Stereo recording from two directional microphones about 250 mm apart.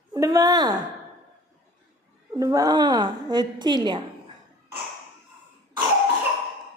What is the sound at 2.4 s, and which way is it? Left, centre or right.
A woman's voice, centre.